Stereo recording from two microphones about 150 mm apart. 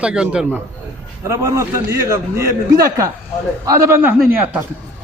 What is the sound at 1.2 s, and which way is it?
A man's voice, 20° right (ahead or behind).